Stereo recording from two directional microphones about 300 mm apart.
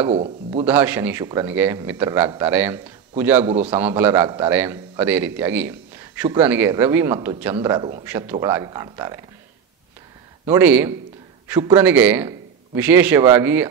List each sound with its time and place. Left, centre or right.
0.0 s a man's voice: centre
0.7 s a man's voice: centre
10.4 s a man's voice: centre